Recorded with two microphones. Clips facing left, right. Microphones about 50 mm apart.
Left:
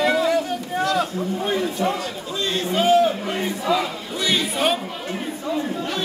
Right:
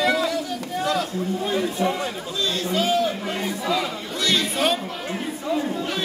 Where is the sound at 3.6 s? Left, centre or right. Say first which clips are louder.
Left 3 dB; centre.